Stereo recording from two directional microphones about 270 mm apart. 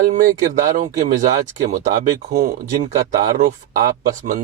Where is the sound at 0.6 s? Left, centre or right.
Right.